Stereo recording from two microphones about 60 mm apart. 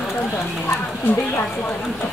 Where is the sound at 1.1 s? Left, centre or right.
Left.